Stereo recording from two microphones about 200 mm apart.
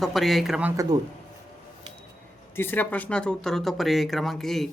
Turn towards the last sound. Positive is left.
turn(degrees=0)  # may be behind; listen again after turning